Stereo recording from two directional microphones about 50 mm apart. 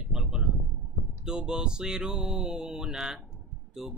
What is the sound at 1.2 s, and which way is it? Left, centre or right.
Speech, centre.